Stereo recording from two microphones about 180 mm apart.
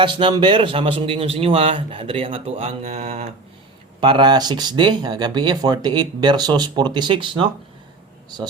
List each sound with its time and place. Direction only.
0.0 s a man's voice: 25° right (ahead or behind)
4.0 s speech: 25° right (ahead or behind)